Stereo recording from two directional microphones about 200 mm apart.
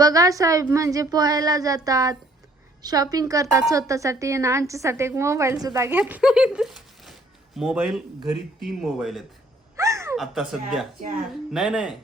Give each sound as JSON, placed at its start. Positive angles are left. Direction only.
{"t": 0.0, "sound": "a woman's voice", "side_deg": -15}
{"t": 9.7, "sound": "a sound", "side_deg": -15}
{"t": 10.2, "sound": "speech", "side_deg": 0}